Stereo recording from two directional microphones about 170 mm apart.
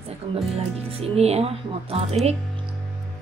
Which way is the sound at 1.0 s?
35° right (ahead or behind).